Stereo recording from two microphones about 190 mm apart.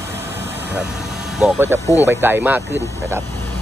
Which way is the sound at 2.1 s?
15° right (ahead or behind).